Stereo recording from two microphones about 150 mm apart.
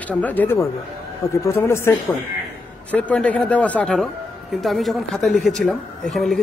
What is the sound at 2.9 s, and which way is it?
A man's voice, 10° left (ahead or behind).